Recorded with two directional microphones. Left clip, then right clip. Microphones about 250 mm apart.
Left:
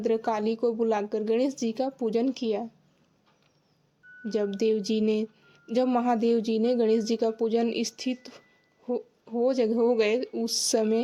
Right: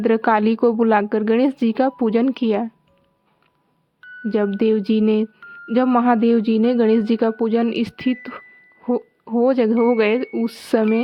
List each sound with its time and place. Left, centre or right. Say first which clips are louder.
0.0 s a woman's voice: right 10 dB; right
4.2 s a woman's voice: right 7 dB; right